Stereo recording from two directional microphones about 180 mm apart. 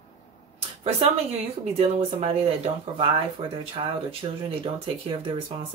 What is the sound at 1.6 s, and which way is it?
Speech, 35° right (ahead or behind).